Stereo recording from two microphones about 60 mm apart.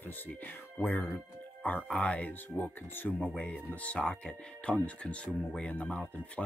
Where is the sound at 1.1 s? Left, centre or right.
Left.